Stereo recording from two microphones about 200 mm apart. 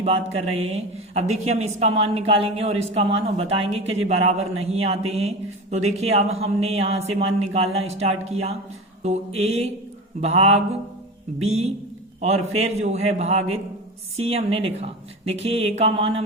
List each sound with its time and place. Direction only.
0.0 s a man's voice: 30° right (ahead or behind)